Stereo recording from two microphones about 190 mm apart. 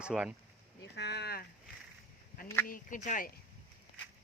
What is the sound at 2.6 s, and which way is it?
Speech, 45° left (ahead or behind).